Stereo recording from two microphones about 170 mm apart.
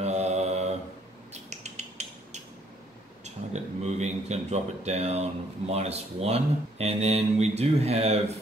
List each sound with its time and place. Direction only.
0.0 s mantra: 40° right (ahead or behind)
1.3 s a sound: 40° right (ahead or behind)
3.3 s speech: 40° right (ahead or behind)